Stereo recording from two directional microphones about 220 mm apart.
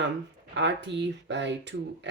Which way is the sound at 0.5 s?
50° right (ahead or behind).